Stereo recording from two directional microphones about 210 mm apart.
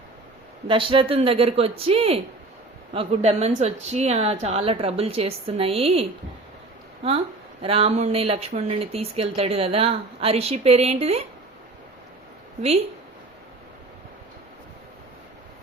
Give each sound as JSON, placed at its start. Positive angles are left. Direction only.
{"t": 0.7, "sound": "speech", "side_deg": -25}
{"t": 7.6, "sound": "speech", "side_deg": -25}